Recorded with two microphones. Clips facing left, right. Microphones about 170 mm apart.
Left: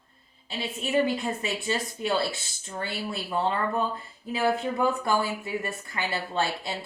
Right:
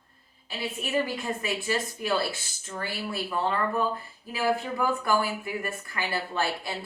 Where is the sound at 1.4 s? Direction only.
25° left (ahead or behind).